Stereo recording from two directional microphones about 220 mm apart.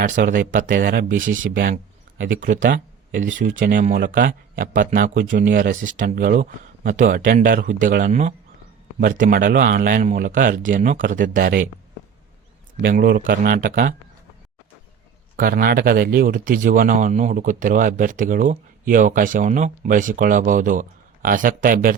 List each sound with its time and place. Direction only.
0.0 s speech: 40° right (ahead or behind)
2.3 s speech: 40° right (ahead or behind)
12.8 s speech: 45° right (ahead or behind)
15.4 s speech: 40° right (ahead or behind)